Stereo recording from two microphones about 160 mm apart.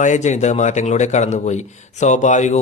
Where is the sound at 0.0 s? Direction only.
50° left (ahead or behind).